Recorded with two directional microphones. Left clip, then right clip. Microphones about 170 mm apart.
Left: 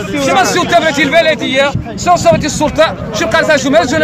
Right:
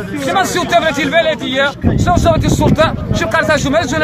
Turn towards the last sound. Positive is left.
turn(degrees=0)  # may be behind; listen again after turning